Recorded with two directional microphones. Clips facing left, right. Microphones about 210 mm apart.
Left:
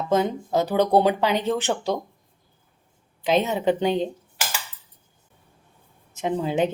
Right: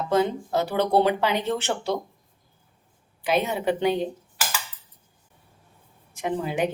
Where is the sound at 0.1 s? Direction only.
20° left (ahead or behind).